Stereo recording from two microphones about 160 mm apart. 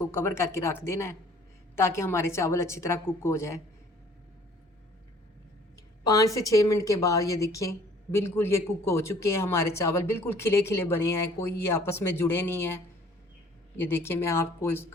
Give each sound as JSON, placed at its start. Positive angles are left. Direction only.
{"t": 0.0, "sound": "a woman's voice", "side_deg": 15}
{"t": 6.0, "sound": "a woman's voice", "side_deg": 20}